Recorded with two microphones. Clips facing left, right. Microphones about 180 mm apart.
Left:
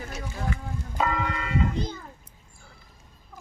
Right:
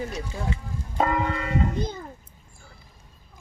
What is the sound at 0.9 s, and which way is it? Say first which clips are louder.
Church bell: right 3 dB; 50° right (ahead or behind).